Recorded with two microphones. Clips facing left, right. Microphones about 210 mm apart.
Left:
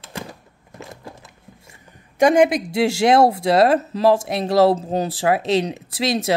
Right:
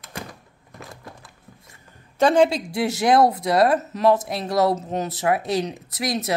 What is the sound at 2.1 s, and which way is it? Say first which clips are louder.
Speech: left 2 dB; 15° left (ahead or behind).